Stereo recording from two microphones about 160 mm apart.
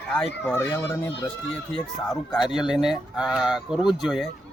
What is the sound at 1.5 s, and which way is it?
Speech, 5° left (ahead or behind).